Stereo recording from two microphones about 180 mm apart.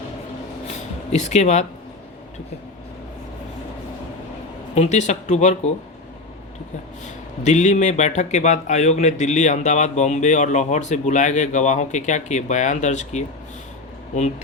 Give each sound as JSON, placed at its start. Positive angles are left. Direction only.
{"t": 0.7, "sound": "a sound", "side_deg": 40}
{"t": 4.7, "sound": "speech", "side_deg": 40}
{"t": 7.4, "sound": "speech", "side_deg": 40}